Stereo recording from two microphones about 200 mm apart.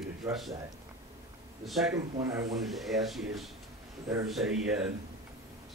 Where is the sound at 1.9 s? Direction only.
15° right (ahead or behind).